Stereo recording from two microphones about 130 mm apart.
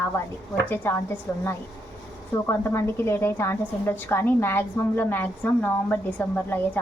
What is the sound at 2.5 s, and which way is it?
A woman's voice, 20° left (ahead or behind).